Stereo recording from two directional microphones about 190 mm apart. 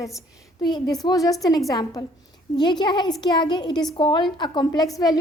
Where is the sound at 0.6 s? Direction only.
20° left (ahead or behind).